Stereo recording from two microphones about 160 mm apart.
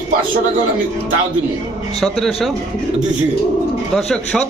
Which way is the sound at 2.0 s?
Centre (ahead or behind).